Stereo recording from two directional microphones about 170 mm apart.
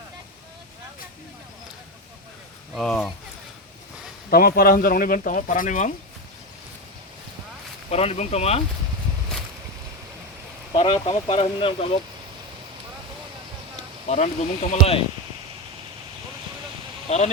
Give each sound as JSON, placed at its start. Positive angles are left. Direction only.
{"t": 2.7, "sound": "speech", "side_deg": 0}
{"t": 4.3, "sound": "speech", "side_deg": 60}
{"t": 7.9, "sound": "speech", "side_deg": 40}
{"t": 10.8, "sound": "speech", "side_deg": 30}
{"t": 14.1, "sound": "speech", "side_deg": 45}
{"t": 17.1, "sound": "speech", "side_deg": 40}